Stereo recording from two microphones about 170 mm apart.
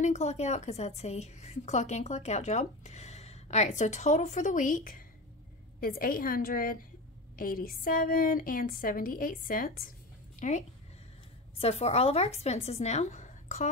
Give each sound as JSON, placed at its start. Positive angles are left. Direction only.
{"t": 0.0, "sound": "a woman's voice", "side_deg": 40}
{"t": 10.4, "sound": "a woman's voice", "side_deg": 45}